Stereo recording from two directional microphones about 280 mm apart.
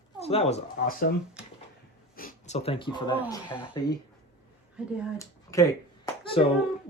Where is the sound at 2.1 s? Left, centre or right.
Left.